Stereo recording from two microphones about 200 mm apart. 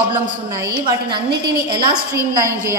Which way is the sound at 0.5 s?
20° right (ahead or behind).